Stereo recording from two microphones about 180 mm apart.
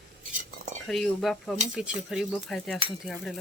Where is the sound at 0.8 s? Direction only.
Centre (ahead or behind).